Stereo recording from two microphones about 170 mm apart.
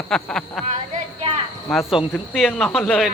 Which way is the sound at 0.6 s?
40° right (ahead or behind).